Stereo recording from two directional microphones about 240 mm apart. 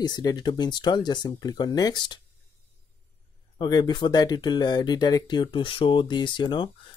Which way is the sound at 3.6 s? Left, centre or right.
Centre.